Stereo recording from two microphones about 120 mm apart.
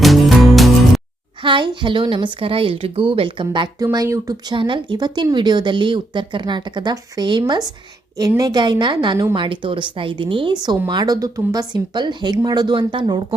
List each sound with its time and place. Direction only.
0.0 s music: centre (ahead or behind)
1.4 s a woman's voice: 45° right (ahead or behind)
3.9 s speech: 30° right (ahead or behind)
4.5 s speech: 40° right (ahead or behind)